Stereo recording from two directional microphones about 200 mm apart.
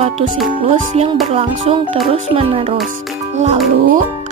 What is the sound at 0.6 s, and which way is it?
Speech, 35° right (ahead or behind).